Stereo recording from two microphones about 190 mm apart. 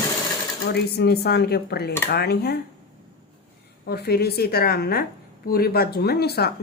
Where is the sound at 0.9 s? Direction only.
60° left (ahead or behind).